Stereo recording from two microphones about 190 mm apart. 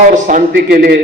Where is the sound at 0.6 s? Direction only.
50° right (ahead or behind).